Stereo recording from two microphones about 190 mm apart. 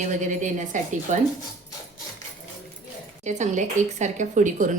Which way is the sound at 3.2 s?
40° right (ahead or behind).